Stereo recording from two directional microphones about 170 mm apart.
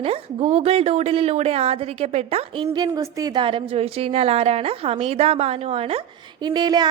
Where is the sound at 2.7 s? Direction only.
20° right (ahead or behind).